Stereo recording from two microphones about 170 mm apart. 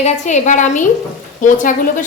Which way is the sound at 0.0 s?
45° left (ahead or behind).